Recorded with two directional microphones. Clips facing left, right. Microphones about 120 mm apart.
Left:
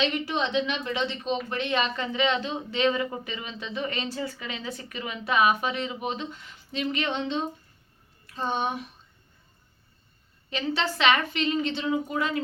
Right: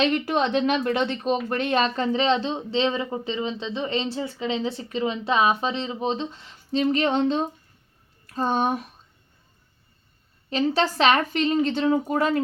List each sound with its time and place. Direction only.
0.0 s speech: 50° right (ahead or behind)
10.5 s speech: 40° right (ahead or behind)